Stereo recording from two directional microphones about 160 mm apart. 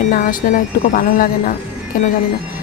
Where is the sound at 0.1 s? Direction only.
55° left (ahead or behind).